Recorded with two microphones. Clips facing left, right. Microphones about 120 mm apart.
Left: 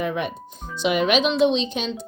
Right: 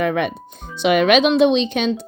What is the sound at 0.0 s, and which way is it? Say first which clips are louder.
Speech: right 6 dB; 70° right (ahead or behind).